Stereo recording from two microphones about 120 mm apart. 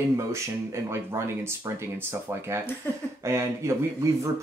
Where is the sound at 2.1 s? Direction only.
20° right (ahead or behind).